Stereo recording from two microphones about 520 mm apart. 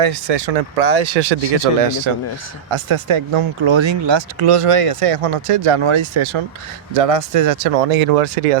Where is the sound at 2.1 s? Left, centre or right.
Right.